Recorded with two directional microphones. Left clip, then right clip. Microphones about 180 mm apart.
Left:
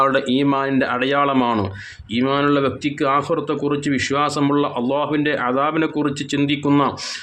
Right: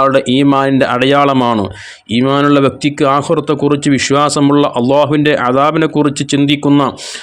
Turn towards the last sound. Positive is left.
turn(degrees=-40)  # may be behind; listen again after turning